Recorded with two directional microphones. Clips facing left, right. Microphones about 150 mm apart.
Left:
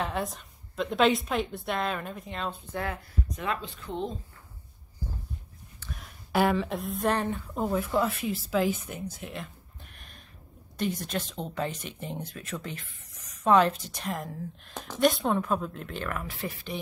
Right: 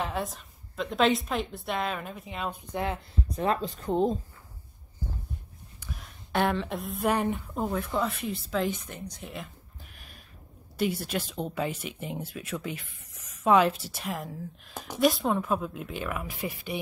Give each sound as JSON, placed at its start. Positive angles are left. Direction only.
{"t": 0.0, "sound": "a woman's voice", "side_deg": 0}
{"t": 2.7, "sound": "speech", "side_deg": -20}
{"t": 3.3, "sound": "speech", "side_deg": -35}
{"t": 5.9, "sound": "speech", "side_deg": 0}
{"t": 7.5, "sound": "speech", "side_deg": 0}